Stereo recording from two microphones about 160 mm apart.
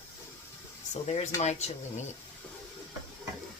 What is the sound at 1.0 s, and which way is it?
Speech, 45° left (ahead or behind).